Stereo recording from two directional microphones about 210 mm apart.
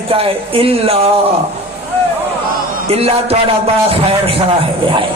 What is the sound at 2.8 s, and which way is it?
A man's voice, 30° right (ahead or behind).